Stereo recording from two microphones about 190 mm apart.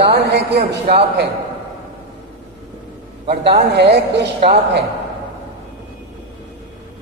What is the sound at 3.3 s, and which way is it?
Speech, 60° right (ahead or behind).